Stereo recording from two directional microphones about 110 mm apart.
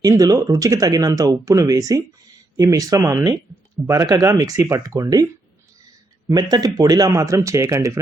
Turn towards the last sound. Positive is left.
turn(degrees=-25)  # may be behind; listen again after turning